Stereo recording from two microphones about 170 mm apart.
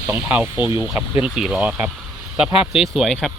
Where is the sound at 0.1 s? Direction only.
10° right (ahead or behind).